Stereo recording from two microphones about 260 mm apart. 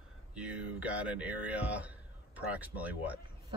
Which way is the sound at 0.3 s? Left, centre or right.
Centre.